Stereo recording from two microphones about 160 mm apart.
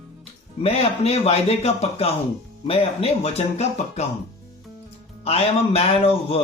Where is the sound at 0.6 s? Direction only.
40° left (ahead or behind).